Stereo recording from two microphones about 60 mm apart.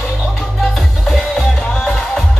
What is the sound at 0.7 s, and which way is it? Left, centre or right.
Music, centre.